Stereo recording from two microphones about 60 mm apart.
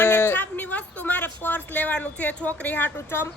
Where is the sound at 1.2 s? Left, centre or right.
Left.